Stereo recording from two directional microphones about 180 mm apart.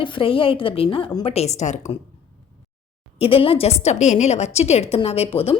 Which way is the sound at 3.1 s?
30° left (ahead or behind).